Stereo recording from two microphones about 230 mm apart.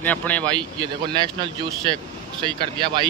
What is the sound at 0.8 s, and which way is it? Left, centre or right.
Speech, centre.